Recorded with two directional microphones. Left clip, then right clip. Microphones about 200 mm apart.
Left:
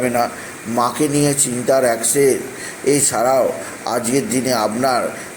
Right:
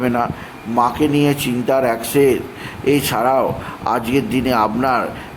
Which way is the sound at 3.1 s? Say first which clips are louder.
Even; 10° right (ahead or behind).